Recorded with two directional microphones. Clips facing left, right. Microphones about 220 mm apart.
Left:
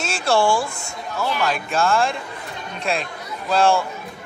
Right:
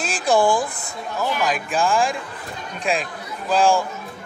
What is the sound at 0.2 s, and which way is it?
Speech, 15° right (ahead or behind).